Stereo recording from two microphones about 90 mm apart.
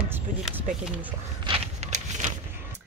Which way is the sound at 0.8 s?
15° right (ahead or behind).